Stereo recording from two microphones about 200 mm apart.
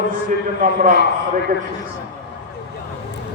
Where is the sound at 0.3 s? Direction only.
40° right (ahead or behind).